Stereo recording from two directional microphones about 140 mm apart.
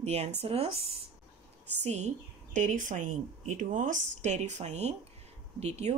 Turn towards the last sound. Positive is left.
turn(degrees=-50)  # may be behind; listen again after turning